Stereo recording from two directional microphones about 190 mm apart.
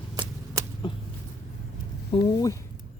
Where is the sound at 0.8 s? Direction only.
25° left (ahead or behind).